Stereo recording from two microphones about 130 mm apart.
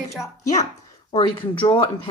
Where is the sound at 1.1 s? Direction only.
40° left (ahead or behind).